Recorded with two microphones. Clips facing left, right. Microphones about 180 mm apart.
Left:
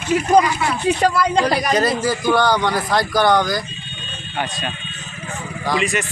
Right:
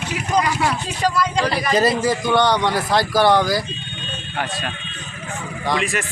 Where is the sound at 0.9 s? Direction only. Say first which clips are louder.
Even; 60° left (ahead or behind).